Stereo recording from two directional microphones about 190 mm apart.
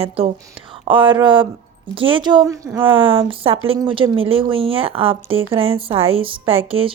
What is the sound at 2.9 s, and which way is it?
A woman's voice, 25° right (ahead or behind).